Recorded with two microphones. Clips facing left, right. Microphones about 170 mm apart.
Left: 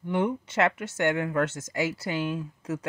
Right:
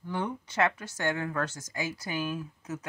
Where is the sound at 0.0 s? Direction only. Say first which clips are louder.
Left 7 dB; 20° left (ahead or behind).